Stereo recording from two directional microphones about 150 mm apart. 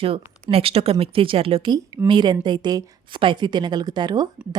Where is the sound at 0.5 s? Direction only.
40° right (ahead or behind).